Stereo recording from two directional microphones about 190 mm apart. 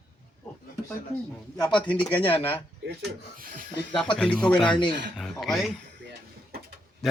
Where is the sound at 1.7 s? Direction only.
5° left (ahead or behind).